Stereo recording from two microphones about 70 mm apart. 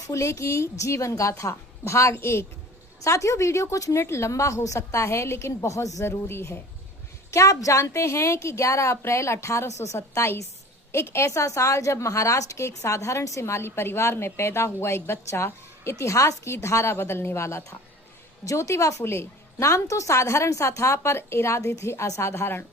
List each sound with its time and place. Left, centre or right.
0.1 s a woman's voice: left
3.0 s a woman's voice: left
7.3 s a woman's voice: left